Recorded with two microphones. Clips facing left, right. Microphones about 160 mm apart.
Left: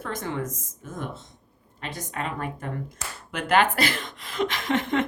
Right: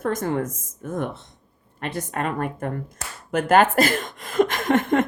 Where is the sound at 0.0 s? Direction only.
45° right (ahead or behind).